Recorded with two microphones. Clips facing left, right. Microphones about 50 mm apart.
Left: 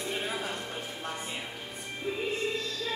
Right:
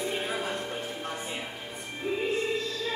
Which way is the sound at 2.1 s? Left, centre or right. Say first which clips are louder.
Right 3 dB; centre.